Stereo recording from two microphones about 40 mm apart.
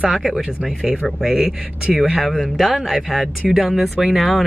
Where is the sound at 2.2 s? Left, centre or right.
Centre.